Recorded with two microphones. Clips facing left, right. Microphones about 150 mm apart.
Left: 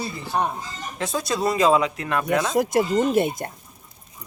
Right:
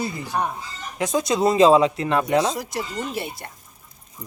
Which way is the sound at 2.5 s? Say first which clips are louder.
Left 9 dB; 50° left (ahead or behind).